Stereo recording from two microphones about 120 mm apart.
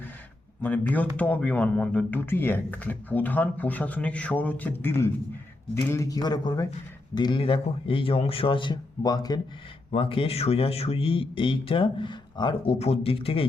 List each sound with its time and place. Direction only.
0.6 s a man's voice: 15° left (ahead or behind); by 9.4 s 35° left (ahead or behind)
9.9 s a man's voice: 50° left (ahead or behind)
12.8 s a man's voice: 55° left (ahead or behind)